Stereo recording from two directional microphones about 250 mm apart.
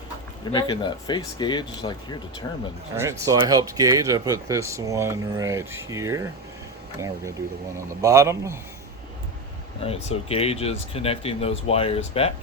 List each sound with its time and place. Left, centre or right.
0.4 s speech: centre
2.9 s speech: centre
8.0 s speech: centre
9.8 s speech: left